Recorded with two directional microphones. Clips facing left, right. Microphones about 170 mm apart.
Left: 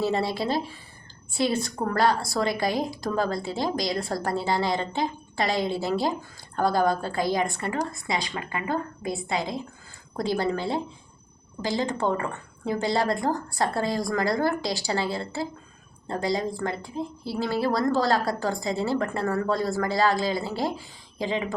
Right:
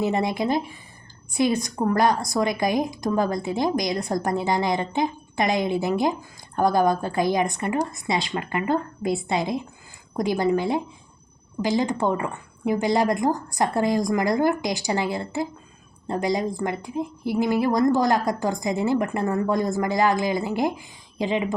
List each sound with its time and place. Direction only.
0.0 s a woman's voice: 15° right (ahead or behind)